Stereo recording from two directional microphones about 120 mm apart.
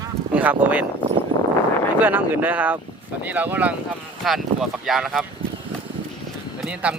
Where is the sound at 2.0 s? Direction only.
15° right (ahead or behind).